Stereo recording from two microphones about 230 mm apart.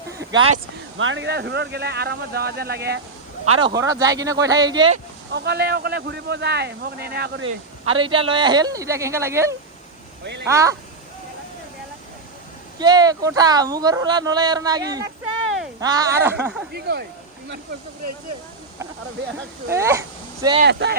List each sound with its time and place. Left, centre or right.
0.3 s speech: right
3.6 s speech: centre
5.3 s speech: right
7.9 s speech: right
12.8 s speech: centre
16.7 s speech: right
19.6 s speech: centre
20.7 s speech: right